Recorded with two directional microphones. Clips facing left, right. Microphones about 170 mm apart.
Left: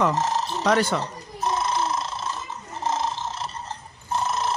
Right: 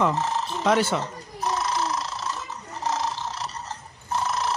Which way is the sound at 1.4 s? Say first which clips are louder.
Left 1 dB; 25° left (ahead or behind).